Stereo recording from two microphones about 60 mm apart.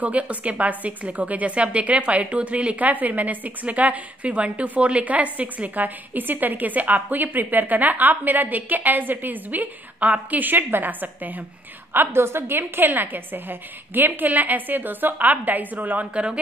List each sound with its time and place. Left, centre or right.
0.0 s a woman's voice: right